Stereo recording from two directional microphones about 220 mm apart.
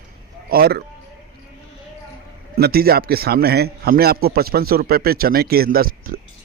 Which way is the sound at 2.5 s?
45° right (ahead or behind).